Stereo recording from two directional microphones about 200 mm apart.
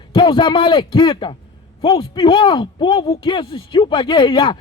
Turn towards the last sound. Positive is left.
turn(degrees=25)  # may be behind; listen again after turning